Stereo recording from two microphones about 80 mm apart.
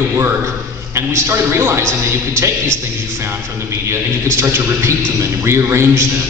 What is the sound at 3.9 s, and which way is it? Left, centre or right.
A man's voice, right.